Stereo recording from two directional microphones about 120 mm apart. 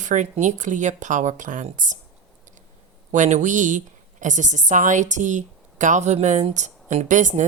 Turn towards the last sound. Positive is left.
turn(degrees=-90)